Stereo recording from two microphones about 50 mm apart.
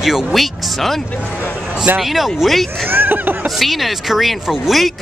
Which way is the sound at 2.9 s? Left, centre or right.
Right.